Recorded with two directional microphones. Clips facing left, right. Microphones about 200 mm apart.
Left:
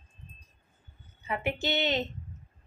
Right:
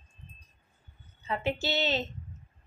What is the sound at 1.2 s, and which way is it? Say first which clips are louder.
Speech: even; 15° left (ahead or behind).